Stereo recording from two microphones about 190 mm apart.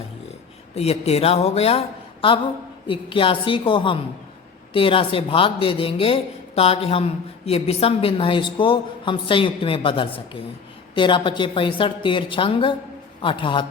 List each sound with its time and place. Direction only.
0.8 s speech: 35° left (ahead or behind)
2.8 s speech: 25° left (ahead or behind)